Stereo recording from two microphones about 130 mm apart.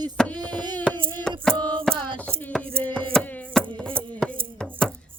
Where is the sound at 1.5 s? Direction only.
10° left (ahead or behind).